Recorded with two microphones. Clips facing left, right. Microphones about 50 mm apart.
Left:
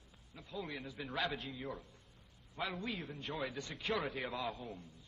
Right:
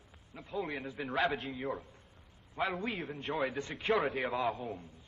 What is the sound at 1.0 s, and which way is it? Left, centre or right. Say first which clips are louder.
A man's voice: right 7 dB; right.